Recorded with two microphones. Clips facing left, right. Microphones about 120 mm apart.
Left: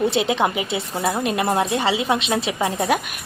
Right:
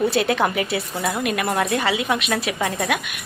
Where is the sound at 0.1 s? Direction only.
20° left (ahead or behind).